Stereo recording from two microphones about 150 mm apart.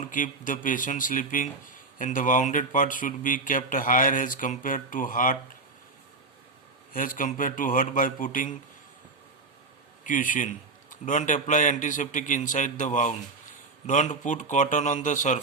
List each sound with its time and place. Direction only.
0.0 s speech: 60° left (ahead or behind)
6.9 s speech: 65° left (ahead or behind)
10.0 s speech: 60° left (ahead or behind)